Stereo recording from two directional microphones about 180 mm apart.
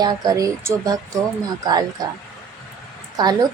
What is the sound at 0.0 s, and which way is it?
A woman's voice, 20° right (ahead or behind).